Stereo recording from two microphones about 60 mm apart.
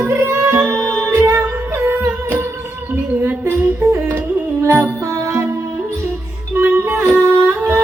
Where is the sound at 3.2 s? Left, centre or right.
Right.